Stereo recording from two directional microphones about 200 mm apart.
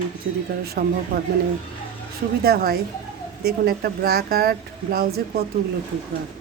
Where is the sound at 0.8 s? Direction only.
50° right (ahead or behind).